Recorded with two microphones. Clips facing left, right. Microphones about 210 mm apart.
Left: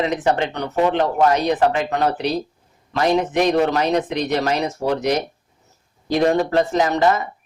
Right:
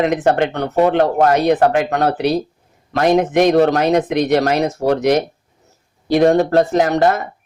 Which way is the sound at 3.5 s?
40° right (ahead or behind).